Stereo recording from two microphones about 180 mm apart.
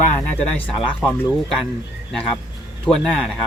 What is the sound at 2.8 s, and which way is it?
Speech, centre (ahead or behind).